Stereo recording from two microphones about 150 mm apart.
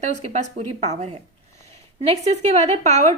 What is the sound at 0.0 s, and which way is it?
A woman's voice, 50° right (ahead or behind).